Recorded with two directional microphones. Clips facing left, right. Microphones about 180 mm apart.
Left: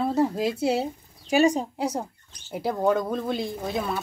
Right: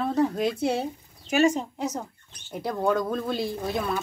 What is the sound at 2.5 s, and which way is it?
Speech, 5° left (ahead or behind).